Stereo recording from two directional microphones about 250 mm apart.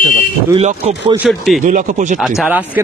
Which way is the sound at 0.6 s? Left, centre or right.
Right.